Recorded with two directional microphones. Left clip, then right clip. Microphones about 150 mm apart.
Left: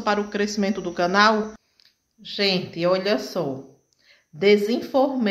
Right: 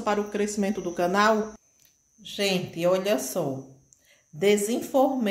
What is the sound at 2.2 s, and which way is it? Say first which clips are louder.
A woman's voice: left 4 dB; 5° right (ahead or behind).